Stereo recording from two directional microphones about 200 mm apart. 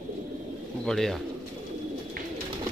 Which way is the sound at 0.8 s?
Centre (ahead or behind).